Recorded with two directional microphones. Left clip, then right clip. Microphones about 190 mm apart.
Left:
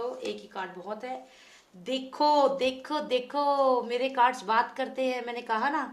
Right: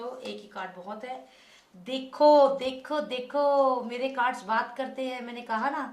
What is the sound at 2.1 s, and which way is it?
Speech, 40° left (ahead or behind).